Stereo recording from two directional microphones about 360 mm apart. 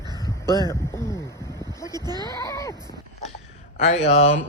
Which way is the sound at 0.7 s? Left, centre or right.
Centre.